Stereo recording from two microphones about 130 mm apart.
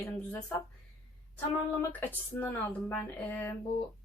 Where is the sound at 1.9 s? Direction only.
15° left (ahead or behind).